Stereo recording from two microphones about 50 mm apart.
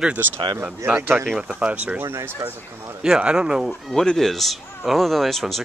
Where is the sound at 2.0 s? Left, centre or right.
Right.